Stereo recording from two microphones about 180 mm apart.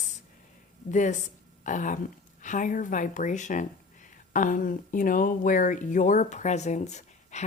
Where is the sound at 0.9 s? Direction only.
40° left (ahead or behind).